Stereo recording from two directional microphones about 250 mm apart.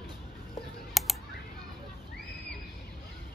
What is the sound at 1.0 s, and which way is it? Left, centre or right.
Typing, centre.